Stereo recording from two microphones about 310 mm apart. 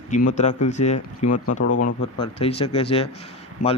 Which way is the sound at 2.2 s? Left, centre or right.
Centre.